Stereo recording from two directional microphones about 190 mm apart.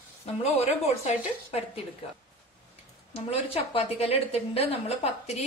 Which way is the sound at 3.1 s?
30° left (ahead or behind).